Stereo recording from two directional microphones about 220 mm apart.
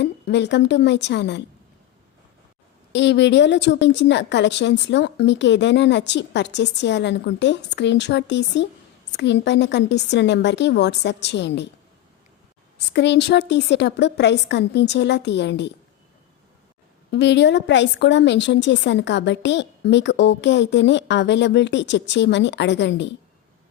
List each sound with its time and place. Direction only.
0.0 s a woman's voice: 50° left (ahead or behind)
2.9 s a woman's voice: 55° left (ahead or behind)
12.9 s a woman's voice: 50° left (ahead or behind)
17.1 s a woman's voice: 50° left (ahead or behind)